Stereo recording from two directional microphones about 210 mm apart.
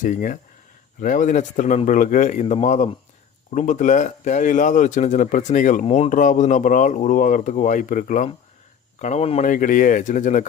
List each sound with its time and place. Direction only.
0.0 s speech: 40° left (ahead or behind)